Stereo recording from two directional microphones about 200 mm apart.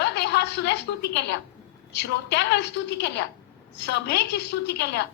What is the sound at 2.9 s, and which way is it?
A woman's voice, 55° left (ahead or behind).